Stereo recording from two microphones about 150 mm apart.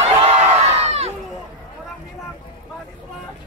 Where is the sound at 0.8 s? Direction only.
45° right (ahead or behind).